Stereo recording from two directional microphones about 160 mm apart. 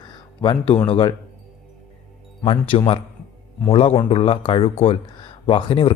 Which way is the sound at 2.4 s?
35° left (ahead or behind).